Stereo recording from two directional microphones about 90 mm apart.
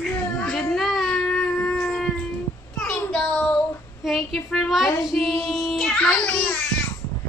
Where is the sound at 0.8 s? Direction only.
5° left (ahead or behind).